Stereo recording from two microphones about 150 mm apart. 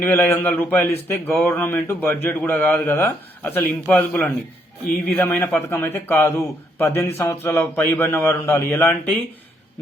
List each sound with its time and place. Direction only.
0.0 s a man's voice: 15° left (ahead or behind)